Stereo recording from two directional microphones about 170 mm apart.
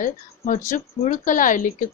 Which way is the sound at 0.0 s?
50° left (ahead or behind).